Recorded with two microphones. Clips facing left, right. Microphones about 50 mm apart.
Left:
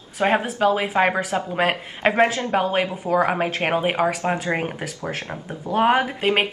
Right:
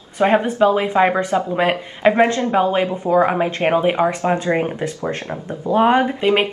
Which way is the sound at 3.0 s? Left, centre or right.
Right.